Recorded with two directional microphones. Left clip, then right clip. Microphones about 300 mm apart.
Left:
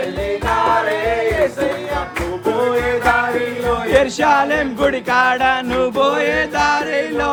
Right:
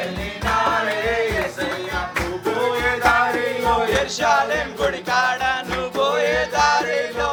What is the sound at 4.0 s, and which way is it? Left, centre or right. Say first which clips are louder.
Music: left 4 dB; centre.